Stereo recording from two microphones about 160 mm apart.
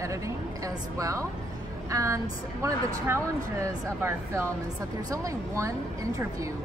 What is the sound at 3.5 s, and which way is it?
A woman's voice, 20° right (ahead or behind).